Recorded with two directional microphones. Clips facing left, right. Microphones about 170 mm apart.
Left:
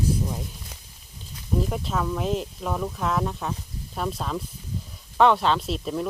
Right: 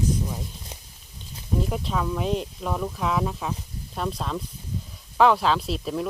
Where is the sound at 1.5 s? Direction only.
Centre (ahead or behind).